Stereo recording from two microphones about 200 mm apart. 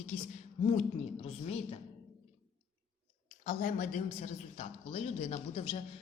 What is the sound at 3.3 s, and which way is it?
A woman's voice, 40° left (ahead or behind).